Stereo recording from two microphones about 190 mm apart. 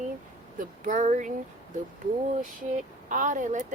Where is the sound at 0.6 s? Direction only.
40° right (ahead or behind).